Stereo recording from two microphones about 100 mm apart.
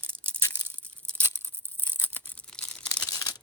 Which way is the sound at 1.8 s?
15° left (ahead or behind).